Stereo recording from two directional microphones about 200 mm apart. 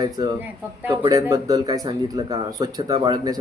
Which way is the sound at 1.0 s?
20° right (ahead or behind).